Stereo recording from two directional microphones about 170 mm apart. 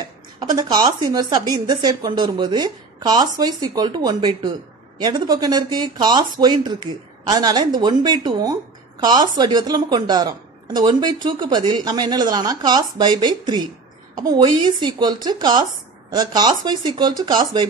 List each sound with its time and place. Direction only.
0.4 s a woman's voice: 25° right (ahead or behind)